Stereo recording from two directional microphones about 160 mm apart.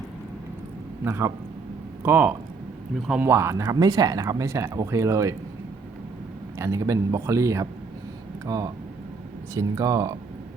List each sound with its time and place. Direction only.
1.0 s a man's voice: 15° right (ahead or behind)
6.6 s speech: 20° right (ahead or behind)